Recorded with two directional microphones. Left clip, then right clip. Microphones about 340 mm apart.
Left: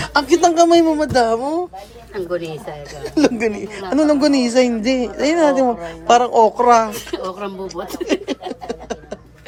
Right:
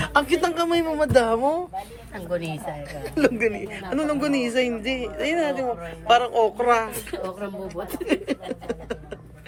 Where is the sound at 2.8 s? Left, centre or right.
Left.